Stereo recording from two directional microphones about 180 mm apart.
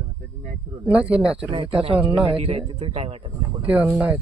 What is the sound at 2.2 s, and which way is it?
Speech, 30° right (ahead or behind).